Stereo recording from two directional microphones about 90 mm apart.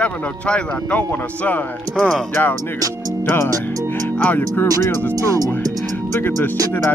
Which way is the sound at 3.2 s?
25° left (ahead or behind).